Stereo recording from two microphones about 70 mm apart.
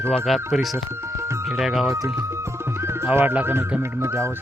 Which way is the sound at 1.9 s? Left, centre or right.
Right.